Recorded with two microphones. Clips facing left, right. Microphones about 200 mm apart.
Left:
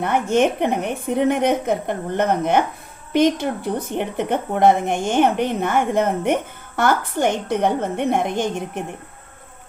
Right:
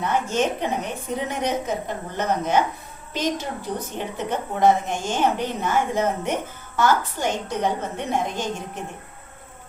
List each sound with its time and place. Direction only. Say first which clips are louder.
0.0 s speech: left 5 dB; 55° left (ahead or behind)